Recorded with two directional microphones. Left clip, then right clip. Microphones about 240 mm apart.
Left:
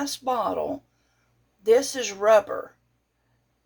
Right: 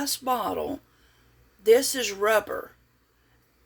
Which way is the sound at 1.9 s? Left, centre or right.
Right.